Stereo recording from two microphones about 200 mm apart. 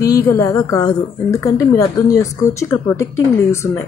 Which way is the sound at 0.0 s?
15° left (ahead or behind).